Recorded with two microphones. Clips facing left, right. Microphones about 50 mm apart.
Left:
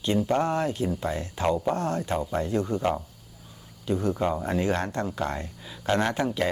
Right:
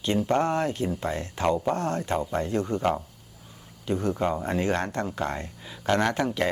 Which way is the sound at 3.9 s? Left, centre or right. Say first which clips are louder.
Even; right.